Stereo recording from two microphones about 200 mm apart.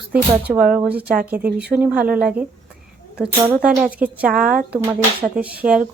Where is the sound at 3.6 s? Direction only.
5° right (ahead or behind).